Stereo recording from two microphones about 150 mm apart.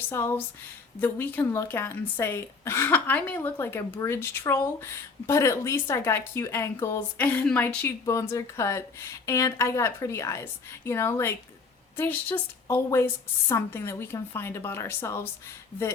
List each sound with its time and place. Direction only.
0.1 s speech: 15° left (ahead or behind)